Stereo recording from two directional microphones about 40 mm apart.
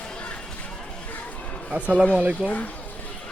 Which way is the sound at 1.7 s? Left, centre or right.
Right.